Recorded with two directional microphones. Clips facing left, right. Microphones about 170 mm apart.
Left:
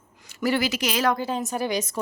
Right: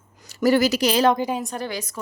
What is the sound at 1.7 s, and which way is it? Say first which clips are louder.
Speech: left 4 dB; 20° left (ahead or behind).